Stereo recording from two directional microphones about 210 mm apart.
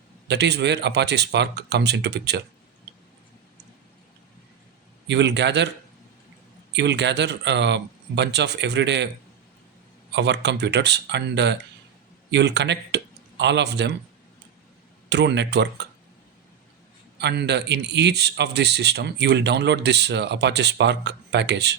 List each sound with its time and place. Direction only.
0.3 s speech: 55° right (ahead or behind)
5.0 s speech: 55° right (ahead or behind)
6.7 s speech: 55° right (ahead or behind)
10.1 s speech: 55° right (ahead or behind)
15.1 s speech: 55° right (ahead or behind)
17.2 s speech: 55° right (ahead or behind)